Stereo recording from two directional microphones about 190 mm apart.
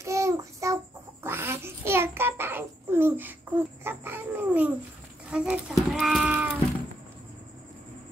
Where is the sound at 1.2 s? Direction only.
10° right (ahead or behind).